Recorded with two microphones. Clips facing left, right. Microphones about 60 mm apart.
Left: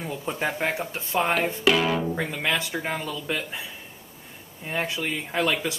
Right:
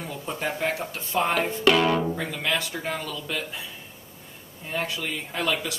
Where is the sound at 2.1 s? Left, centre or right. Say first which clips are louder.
Left 1 dB; centre.